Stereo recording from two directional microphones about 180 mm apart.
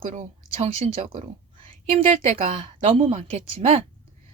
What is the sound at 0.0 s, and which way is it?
Speech, 40° right (ahead or behind).